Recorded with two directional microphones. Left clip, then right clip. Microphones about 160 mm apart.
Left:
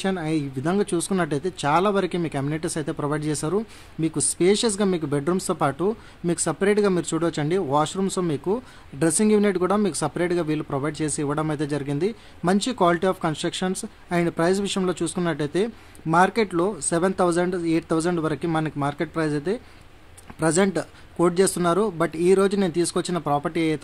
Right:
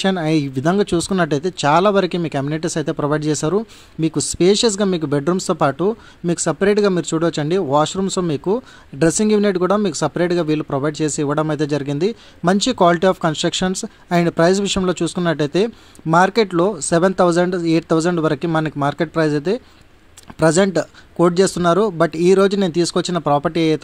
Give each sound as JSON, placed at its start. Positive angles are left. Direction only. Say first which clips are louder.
{"t": 0.0, "sound": "speech", "louder": "right 7 dB", "side_deg": -40}